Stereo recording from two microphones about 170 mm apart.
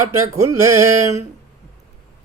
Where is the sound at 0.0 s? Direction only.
20° right (ahead or behind).